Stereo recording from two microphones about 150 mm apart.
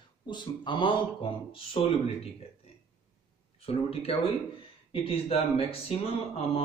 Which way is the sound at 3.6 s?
40° left (ahead or behind).